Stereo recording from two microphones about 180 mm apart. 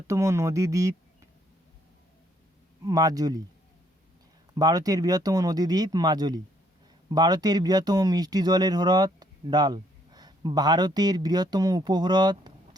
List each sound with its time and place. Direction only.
0.1 s speech: 15° right (ahead or behind)
2.8 s speech: 20° right (ahead or behind)
4.5 s speech: 20° right (ahead or behind)